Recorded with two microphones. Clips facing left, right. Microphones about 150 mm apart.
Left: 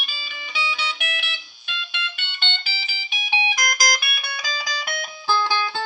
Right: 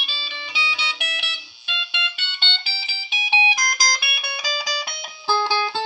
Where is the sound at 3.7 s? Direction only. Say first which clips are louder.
Left 1 dB; 50° left (ahead or behind).